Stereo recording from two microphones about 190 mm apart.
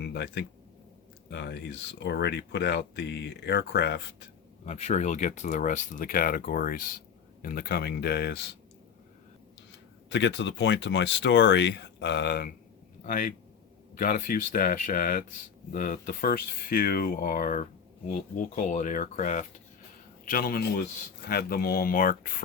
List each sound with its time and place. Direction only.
0.0 s speech: 60° left (ahead or behind)
4.6 s speech: 35° left (ahead or behind); by 8.4 s 65° left (ahead or behind)
10.1 s speech: 70° left (ahead or behind); by 22.3 s 50° left (ahead or behind)